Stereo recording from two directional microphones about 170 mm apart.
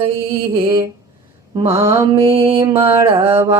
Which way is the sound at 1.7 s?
15° right (ahead or behind).